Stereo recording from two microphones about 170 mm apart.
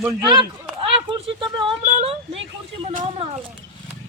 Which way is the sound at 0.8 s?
30° right (ahead or behind).